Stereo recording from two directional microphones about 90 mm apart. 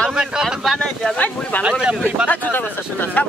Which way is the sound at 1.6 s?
10° right (ahead or behind).